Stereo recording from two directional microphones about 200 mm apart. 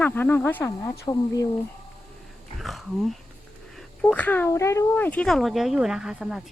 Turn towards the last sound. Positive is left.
turn(degrees=-5)  # may be behind; listen again after turning